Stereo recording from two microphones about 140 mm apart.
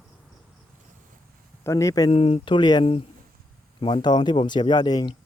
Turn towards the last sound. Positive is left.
turn(degrees=30)  # may be behind; listen again after turning